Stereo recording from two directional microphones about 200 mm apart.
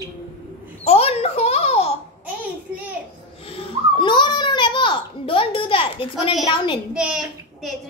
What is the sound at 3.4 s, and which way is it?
Babbling, 30° left (ahead or behind).